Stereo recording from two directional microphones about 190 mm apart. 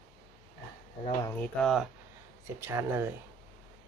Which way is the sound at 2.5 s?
15° right (ahead or behind).